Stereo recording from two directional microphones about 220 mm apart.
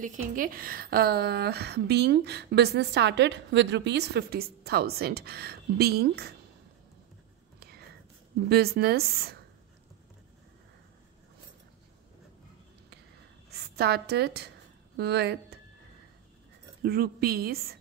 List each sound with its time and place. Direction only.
0.0 s a woman's voice: 40° right (ahead or behind)
8.5 s a woman's voice: 45° right (ahead or behind)
13.5 s a woman's voice: 45° right (ahead or behind)
16.8 s a woman's voice: 45° right (ahead or behind)